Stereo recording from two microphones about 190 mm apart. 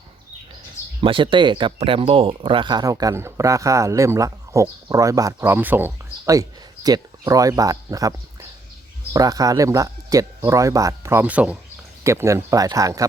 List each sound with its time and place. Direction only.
1.0 s speech: 25° right (ahead or behind)
9.1 s speech: 20° right (ahead or behind)